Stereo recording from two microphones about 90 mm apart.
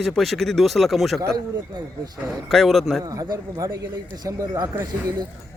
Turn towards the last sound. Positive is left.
turn(degrees=-45)  # may be behind; listen again after turning